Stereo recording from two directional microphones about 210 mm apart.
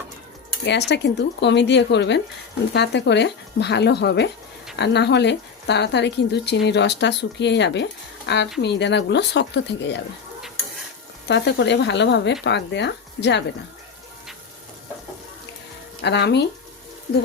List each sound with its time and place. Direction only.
0.6 s speech: 55° left (ahead or behind)
11.3 s speech: 55° left (ahead or behind)
16.0 s speech: 55° left (ahead or behind)